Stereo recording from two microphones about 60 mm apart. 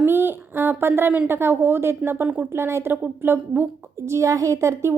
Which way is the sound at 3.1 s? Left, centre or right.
Right.